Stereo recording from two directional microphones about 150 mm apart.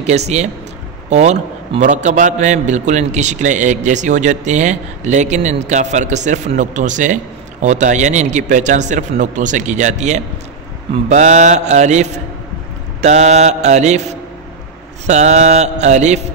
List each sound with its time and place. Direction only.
0.0 s a man's voice: 50° right (ahead or behind)
15.0 s a man's voice: 50° right (ahead or behind)